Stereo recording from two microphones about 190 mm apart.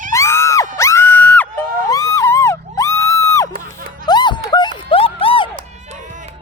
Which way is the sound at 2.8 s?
15° left (ahead or behind).